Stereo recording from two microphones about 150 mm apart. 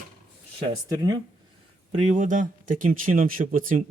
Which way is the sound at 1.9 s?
50° right (ahead or behind).